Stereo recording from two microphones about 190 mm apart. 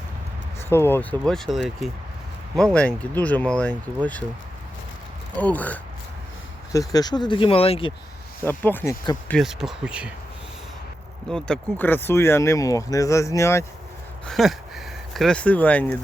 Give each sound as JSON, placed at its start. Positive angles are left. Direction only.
{"t": 0.7, "sound": "speech", "side_deg": 10}
{"t": 5.4, "sound": "speech", "side_deg": 10}
{"t": 6.7, "sound": "speech", "side_deg": 20}
{"t": 8.4, "sound": "speech", "side_deg": 10}
{"t": 9.4, "sound": "speech", "side_deg": 0}
{"t": 11.3, "sound": "speech", "side_deg": 5}
{"t": 14.3, "sound": "speech", "side_deg": 0}